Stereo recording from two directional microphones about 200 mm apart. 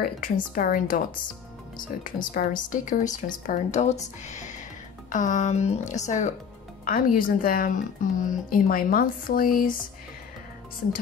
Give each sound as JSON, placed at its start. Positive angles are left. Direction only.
{"t": 0.0, "sound": "speech", "side_deg": 45}
{"t": 2.3, "sound": "speech", "side_deg": 40}